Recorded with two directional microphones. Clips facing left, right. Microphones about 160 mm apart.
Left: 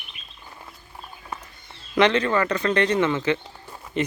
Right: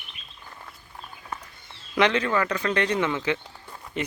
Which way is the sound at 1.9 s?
10° right (ahead or behind).